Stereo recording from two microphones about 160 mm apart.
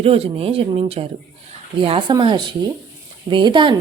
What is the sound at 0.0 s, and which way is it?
A woman's voice, 35° right (ahead or behind).